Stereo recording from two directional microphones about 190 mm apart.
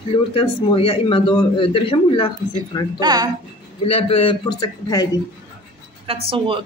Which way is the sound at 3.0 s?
20° right (ahead or behind).